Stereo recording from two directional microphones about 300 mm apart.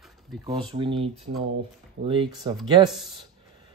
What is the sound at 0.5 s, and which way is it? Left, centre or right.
Speech, centre.